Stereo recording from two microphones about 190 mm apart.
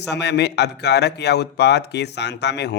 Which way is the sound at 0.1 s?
60° left (ahead or behind).